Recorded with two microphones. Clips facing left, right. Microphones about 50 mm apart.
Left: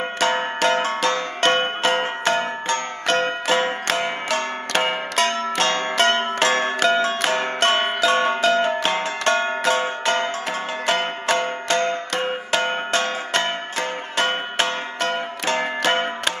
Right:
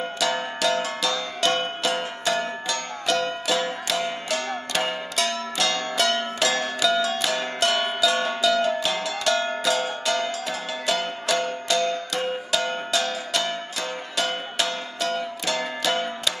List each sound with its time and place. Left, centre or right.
0.2 s music: left